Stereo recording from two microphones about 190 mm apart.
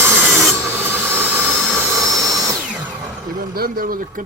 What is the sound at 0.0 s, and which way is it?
Rub, 5° right (ahead or behind).